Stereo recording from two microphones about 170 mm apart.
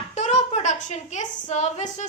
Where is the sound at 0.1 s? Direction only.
40° left (ahead or behind).